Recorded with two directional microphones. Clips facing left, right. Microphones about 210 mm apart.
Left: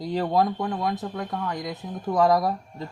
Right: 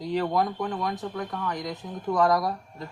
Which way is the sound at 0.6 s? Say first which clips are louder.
Left 2 dB; 20° left (ahead or behind).